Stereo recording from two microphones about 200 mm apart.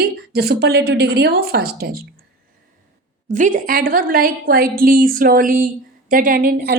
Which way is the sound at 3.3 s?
40° right (ahead or behind).